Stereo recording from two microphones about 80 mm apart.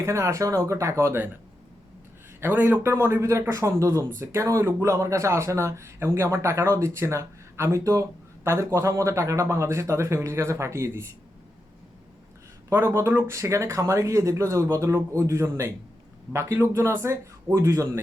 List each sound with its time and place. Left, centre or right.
0.0 s speech: right
2.4 s speech: right
12.7 s speech: right